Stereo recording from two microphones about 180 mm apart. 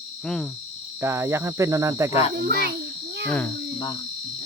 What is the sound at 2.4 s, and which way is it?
Speech, 55° right (ahead or behind).